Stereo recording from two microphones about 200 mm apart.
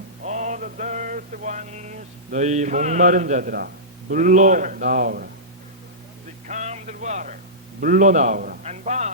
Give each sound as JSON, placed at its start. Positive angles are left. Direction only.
{"t": 0.3, "sound": "mantra", "side_deg": -35}
{"t": 4.1, "sound": "a man's voice", "side_deg": -40}
{"t": 6.5, "sound": "a sound", "side_deg": -35}
{"t": 7.8, "sound": "a man's voice", "side_deg": -40}